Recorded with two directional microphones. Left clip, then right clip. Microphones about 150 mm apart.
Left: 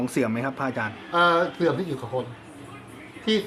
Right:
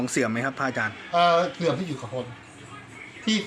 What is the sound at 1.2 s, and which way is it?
Speech, 25° left (ahead or behind).